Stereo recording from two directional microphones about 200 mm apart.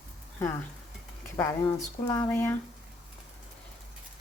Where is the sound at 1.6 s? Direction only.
15° left (ahead or behind).